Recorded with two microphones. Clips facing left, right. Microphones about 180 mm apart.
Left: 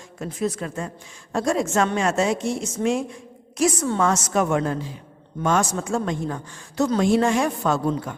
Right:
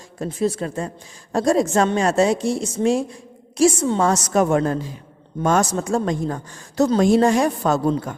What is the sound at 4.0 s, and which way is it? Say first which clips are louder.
A man's voice: right 3 dB; 35° right (ahead or behind).